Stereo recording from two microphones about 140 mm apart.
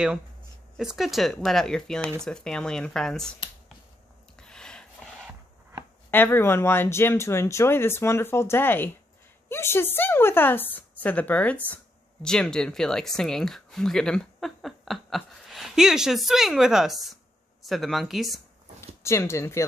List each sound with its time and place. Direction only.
0.7 s speech: centre (ahead or behind)
4.4 s a sound: 5° left (ahead or behind)
6.0 s a woman's voice: 15° left (ahead or behind)
18.8 s speech: 20° left (ahead or behind)